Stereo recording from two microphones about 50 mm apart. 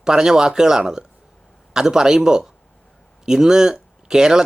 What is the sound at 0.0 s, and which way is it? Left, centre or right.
Speech, centre.